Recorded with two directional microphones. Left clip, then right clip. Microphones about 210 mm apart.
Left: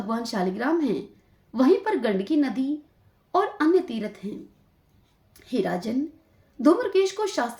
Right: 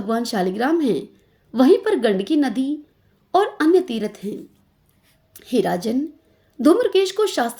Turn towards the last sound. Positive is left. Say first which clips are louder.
# right 5 dB
turn(degrees=-40)  # may be behind; listen again after turning